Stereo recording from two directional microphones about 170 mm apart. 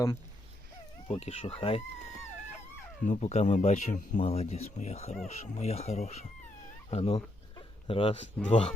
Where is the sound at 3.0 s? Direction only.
45° left (ahead or behind).